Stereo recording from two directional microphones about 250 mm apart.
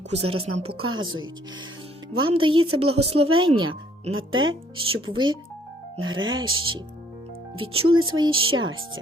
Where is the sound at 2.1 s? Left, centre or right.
Right.